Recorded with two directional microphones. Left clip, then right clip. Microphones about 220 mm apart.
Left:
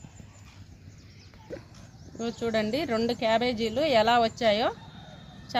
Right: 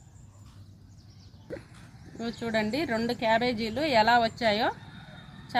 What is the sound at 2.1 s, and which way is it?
A woman's voice, 25° left (ahead or behind).